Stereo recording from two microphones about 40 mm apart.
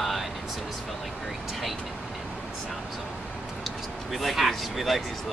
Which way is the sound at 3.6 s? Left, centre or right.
Centre.